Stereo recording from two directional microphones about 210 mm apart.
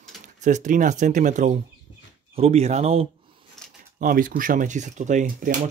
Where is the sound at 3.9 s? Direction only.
40° right (ahead or behind).